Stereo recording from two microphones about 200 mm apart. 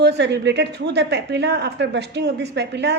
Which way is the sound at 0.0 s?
60° right (ahead or behind).